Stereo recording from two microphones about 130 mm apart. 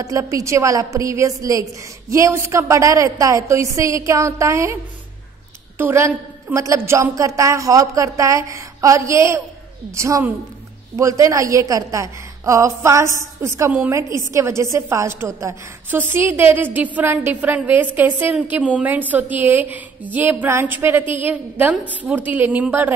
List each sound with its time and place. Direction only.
0.0 s a woman's voice: 25° right (ahead or behind)
5.8 s a woman's voice: 20° right (ahead or behind)